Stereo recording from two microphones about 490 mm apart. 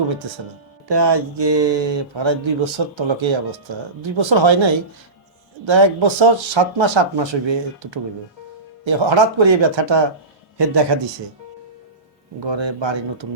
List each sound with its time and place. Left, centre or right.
0.9 s speech: right
12.4 s speech: right